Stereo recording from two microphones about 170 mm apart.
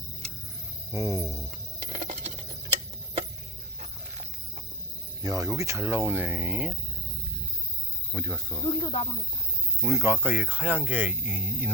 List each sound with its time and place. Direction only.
0.9 s cricket: 20° right (ahead or behind)
1.2 s cricket: centre (ahead or behind)
1.5 s a sound: 45° right (ahead or behind)
5.2 s speech: 20° right (ahead or behind)
8.1 s speech: 15° right (ahead or behind)
8.7 s speech: 30° left (ahead or behind)
9.8 s speech: 15° right (ahead or behind)